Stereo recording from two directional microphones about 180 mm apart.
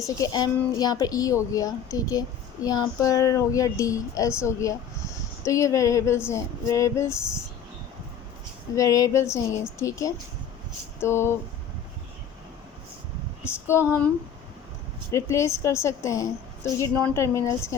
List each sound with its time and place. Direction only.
0.0 s a woman's voice: 20° left (ahead or behind)
8.7 s speech: 20° left (ahead or behind)
13.4 s speech: 15° left (ahead or behind)
15.1 s speech: 15° left (ahead or behind)